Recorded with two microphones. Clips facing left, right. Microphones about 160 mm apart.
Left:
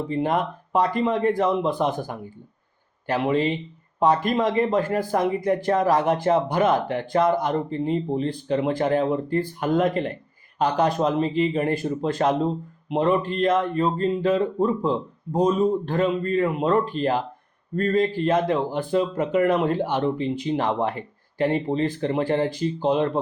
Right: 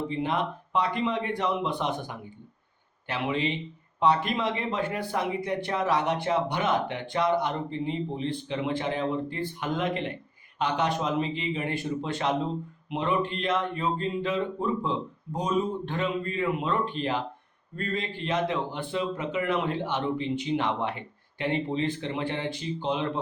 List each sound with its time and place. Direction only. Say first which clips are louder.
0.1 s speech: left 5 dB; 45° left (ahead or behind)